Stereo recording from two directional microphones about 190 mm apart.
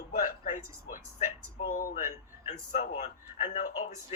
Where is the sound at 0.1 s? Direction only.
45° left (ahead or behind).